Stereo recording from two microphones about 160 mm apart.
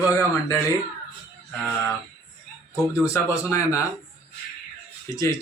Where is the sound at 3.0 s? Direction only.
20° left (ahead or behind).